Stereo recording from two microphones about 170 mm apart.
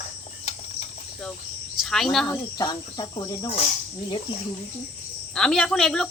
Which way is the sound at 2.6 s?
25° left (ahead or behind).